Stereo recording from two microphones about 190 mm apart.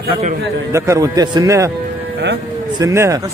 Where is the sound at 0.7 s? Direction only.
15° right (ahead or behind).